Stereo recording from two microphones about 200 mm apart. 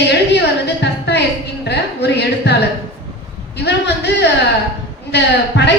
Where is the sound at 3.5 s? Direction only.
60° left (ahead or behind).